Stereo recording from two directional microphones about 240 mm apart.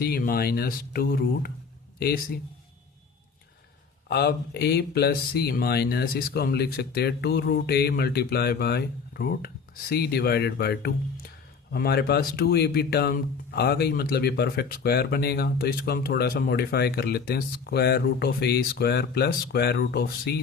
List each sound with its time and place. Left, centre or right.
0.0 s speech: left
4.1 s speech: left